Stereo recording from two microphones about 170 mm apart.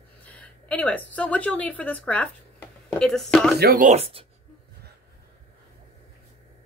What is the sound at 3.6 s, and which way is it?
Speech, 55° right (ahead or behind).